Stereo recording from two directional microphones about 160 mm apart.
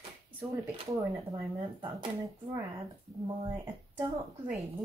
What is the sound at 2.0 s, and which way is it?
Speech, 20° right (ahead or behind).